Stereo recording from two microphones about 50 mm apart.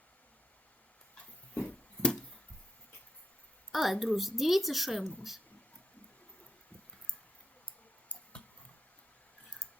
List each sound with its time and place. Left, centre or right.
1.6 s a sound: left
3.7 s a woman's voice: centre
8.1 s clicking: left